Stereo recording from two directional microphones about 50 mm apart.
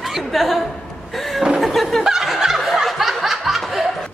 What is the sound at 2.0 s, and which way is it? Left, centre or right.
Turkey, centre.